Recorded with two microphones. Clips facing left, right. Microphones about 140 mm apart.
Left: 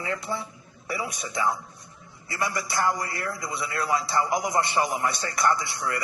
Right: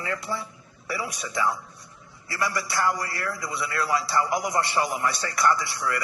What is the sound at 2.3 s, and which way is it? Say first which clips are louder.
A man's voice: right 1 dB; 20° left (ahead or behind).